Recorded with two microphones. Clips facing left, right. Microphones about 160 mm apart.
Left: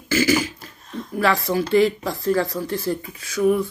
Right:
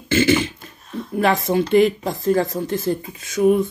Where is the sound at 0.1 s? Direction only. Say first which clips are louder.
Right 2 dB; 25° right (ahead or behind).